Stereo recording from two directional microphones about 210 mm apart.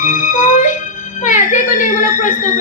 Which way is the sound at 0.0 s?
40° left (ahead or behind).